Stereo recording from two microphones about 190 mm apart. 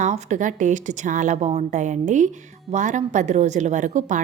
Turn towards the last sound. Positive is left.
turn(degrees=-40)  # may be behind; listen again after turning